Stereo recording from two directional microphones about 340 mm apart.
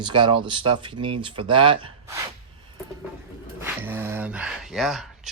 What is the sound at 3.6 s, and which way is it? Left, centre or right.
Speech, centre.